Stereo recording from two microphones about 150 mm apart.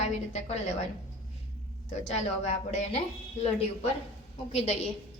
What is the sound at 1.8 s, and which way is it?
A woman's voice, 50° left (ahead or behind).